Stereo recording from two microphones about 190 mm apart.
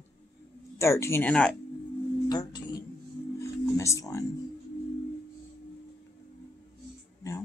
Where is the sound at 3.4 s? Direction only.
15° left (ahead or behind).